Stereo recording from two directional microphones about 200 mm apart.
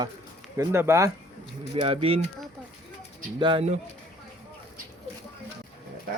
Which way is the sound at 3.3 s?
25° right (ahead or behind).